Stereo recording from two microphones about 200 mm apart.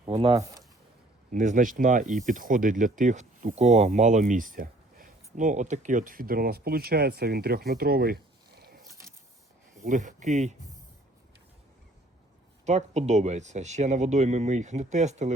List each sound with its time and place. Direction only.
0.1 s speech: 30° right (ahead or behind)
0.3 s speech: 15° right (ahead or behind)
1.3 s speech: 40° right (ahead or behind)
9.8 s speech: 40° right (ahead or behind)
12.6 s speech: 35° right (ahead or behind)